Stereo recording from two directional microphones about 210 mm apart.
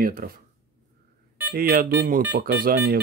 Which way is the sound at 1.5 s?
45° right (ahead or behind).